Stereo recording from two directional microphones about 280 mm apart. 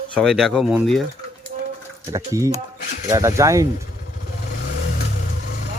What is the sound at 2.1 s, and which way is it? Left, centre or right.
Speech, centre.